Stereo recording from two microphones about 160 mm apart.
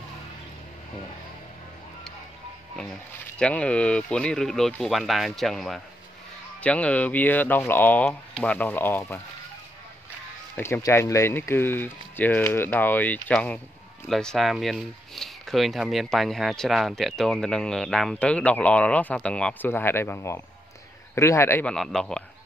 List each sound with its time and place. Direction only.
3.3 s speech: 5° left (ahead or behind)
10.5 s speech: 15° left (ahead or behind)
21.7 s speech: 5° left (ahead or behind)